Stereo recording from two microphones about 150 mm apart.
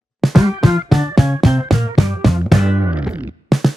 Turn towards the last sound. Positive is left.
turn(degrees=0)  # may be behind; listen again after turning